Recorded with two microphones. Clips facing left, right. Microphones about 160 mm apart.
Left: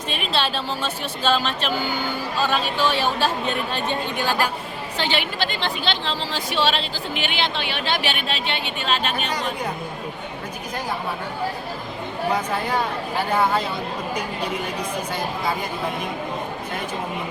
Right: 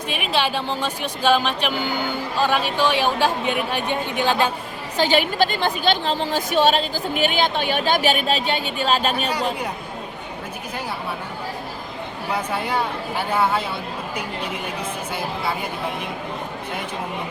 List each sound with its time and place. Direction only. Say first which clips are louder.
0.1 s a woman's voice: right 2 dB; 10° right (ahead or behind)
4.9 s speech: right 7 dB; 45° right (ahead or behind)
12.3 s a woman's voice: even; 10° right (ahead or behind)